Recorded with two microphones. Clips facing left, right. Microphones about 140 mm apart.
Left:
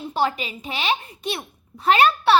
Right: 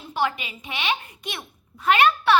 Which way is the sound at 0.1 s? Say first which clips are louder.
Left 2 dB; 30° left (ahead or behind).